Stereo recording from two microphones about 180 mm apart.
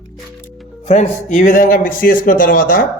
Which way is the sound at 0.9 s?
45° left (ahead or behind).